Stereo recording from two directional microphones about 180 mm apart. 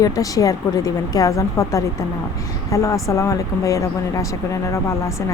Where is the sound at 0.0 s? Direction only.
20° left (ahead or behind).